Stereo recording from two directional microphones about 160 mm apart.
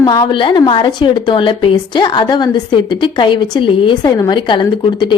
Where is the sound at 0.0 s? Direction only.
25° left (ahead or behind).